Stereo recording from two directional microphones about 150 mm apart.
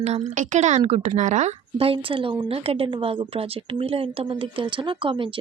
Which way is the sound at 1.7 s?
40° right (ahead or behind).